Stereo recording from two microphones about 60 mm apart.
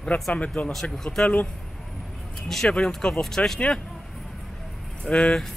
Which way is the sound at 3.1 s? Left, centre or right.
Centre.